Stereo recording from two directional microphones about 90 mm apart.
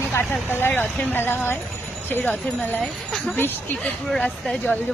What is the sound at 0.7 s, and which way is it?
Speech, 10° left (ahead or behind).